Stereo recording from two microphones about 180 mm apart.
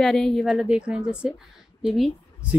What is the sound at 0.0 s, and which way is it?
A woman's voice, 5° left (ahead or behind).